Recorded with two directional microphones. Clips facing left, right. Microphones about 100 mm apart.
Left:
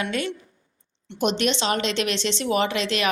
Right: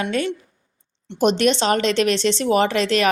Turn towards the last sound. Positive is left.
turn(degrees=-40)  # may be behind; listen again after turning